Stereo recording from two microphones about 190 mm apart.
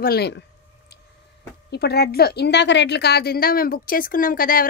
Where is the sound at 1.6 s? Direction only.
60° left (ahead or behind).